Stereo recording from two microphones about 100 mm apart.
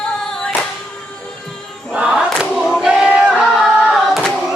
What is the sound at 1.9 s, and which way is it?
Choir, 10° right (ahead or behind).